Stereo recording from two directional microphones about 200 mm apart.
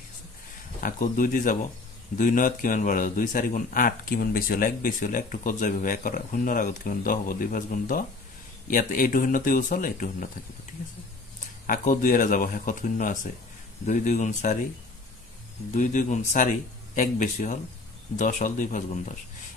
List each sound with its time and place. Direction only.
0.7 s speech: 40° left (ahead or behind)
11.6 s speech: 40° left (ahead or behind)
15.7 s speech: 40° left (ahead or behind)